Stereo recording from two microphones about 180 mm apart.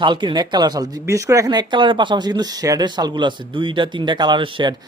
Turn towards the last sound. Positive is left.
turn(degrees=-25)  # may be behind; listen again after turning